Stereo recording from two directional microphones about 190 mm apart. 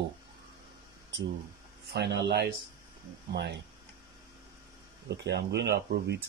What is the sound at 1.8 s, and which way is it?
Speech, 60° right (ahead or behind).